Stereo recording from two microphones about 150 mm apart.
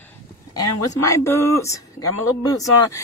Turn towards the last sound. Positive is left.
turn(degrees=25)  # may be behind; listen again after turning